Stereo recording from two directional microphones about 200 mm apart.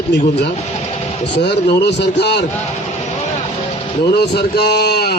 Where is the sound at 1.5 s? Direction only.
60° left (ahead or behind).